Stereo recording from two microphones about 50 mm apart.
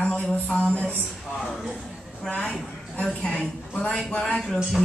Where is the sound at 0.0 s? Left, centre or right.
Left.